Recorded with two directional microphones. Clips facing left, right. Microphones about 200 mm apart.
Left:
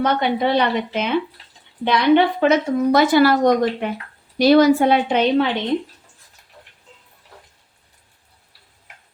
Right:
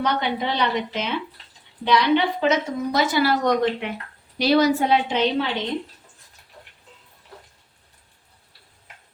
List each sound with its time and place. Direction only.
0.0 s a woman's voice: 55° left (ahead or behind)
4.4 s a woman's voice: 50° left (ahead or behind)